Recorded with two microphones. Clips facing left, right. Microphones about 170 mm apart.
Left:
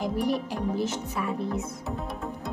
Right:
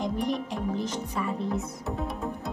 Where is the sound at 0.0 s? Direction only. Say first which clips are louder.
Left 2 dB; 5° left (ahead or behind).